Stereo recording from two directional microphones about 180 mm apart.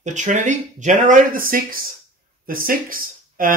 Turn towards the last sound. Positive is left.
turn(degrees=-50)  # may be behind; listen again after turning